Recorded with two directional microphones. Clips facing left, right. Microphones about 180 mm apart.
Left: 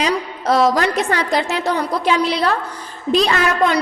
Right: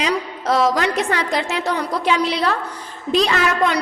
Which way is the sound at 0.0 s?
40° left (ahead or behind).